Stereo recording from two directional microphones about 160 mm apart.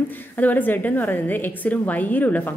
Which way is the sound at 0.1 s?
10° left (ahead or behind).